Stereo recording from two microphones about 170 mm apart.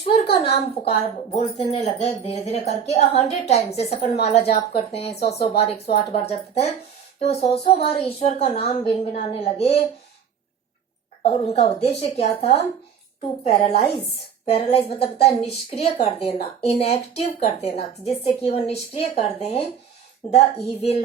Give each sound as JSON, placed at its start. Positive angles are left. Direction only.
{"t": 0.0, "sound": "a woman's voice", "side_deg": 35}
{"t": 11.2, "sound": "speech", "side_deg": 40}